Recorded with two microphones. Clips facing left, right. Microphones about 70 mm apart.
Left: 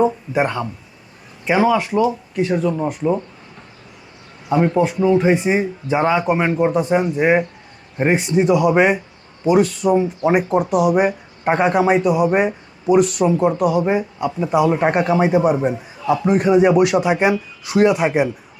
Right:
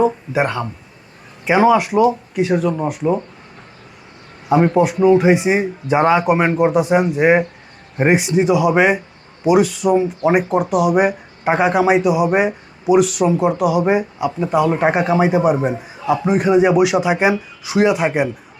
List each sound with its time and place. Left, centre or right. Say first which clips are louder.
0.0 s speech: right 1 dB; centre
1.5 s speech: right 3 dB; centre
4.7 s speech: right 4 dB; centre
14.3 s speech: left 1 dB; centre